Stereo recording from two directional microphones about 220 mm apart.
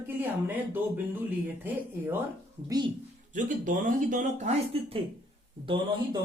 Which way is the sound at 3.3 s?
35° right (ahead or behind).